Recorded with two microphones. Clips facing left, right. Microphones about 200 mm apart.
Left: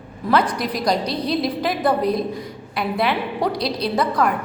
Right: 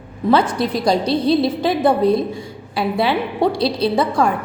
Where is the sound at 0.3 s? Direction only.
25° right (ahead or behind).